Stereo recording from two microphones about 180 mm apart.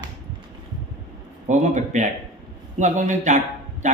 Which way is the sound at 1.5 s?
40° right (ahead or behind).